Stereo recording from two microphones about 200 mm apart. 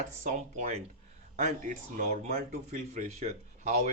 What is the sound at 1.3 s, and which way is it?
Speech, 40° right (ahead or behind).